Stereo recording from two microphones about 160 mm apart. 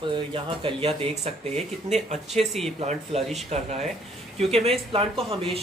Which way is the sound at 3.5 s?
40° right (ahead or behind).